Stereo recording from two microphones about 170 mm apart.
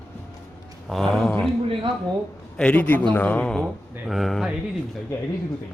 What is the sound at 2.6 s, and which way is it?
A man's voice, 5° left (ahead or behind).